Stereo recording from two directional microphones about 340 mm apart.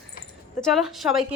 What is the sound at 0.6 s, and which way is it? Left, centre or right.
Speech, centre.